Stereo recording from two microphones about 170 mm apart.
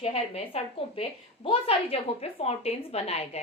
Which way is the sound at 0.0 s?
35° left (ahead or behind).